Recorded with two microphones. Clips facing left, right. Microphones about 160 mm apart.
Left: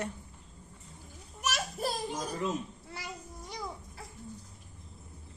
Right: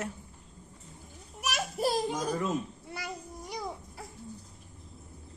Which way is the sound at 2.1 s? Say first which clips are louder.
Right 3 dB; 70° right (ahead or behind).